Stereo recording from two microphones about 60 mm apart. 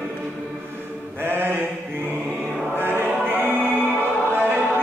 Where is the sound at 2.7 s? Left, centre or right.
Right.